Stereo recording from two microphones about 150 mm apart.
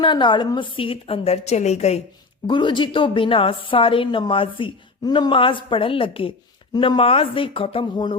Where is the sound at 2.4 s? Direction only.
30° left (ahead or behind).